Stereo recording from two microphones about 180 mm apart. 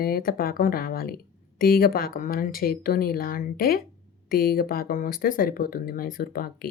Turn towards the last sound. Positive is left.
turn(degrees=55)  # may be behind; listen again after turning